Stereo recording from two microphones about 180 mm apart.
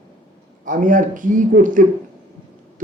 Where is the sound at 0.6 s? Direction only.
45° right (ahead or behind).